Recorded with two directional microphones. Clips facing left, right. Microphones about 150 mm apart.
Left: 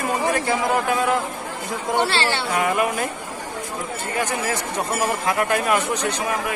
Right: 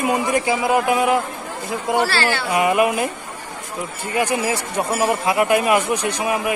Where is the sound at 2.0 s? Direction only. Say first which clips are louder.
Left 1 dB; 25° left (ahead or behind).